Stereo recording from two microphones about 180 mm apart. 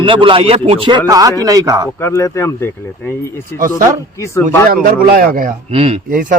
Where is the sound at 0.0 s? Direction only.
30° right (ahead or behind).